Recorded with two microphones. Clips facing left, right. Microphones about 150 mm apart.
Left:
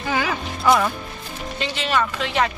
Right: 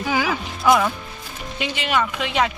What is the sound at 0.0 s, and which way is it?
Music, 5° right (ahead or behind).